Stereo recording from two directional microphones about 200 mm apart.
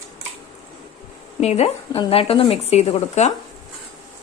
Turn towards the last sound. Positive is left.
turn(degrees=30)  # may be behind; listen again after turning